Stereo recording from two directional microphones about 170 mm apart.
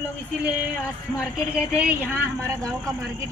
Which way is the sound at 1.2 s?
5° right (ahead or behind).